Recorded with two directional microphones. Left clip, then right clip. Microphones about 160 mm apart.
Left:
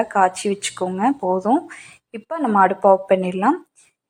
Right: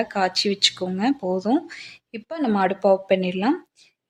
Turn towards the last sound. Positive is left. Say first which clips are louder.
# left 4 dB
turn(degrees=-15)  # may be behind; listen again after turning